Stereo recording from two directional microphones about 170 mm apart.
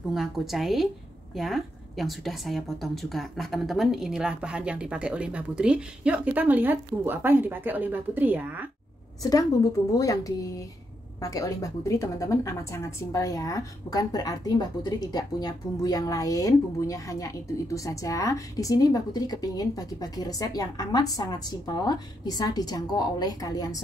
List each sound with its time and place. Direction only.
0.1 s a woman's voice: centre (ahead or behind)
9.2 s a woman's voice: 20° left (ahead or behind)